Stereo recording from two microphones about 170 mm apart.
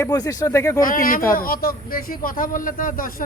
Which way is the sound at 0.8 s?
55° left (ahead or behind).